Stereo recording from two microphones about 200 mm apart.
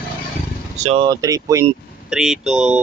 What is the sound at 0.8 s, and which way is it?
Speech, 30° right (ahead or behind).